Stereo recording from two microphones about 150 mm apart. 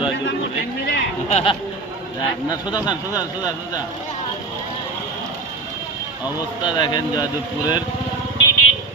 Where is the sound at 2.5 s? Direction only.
25° left (ahead or behind).